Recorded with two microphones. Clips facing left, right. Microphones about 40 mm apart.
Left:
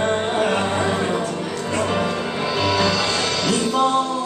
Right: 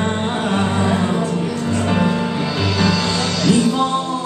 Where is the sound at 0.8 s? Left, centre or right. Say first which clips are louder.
Right 3 dB; centre.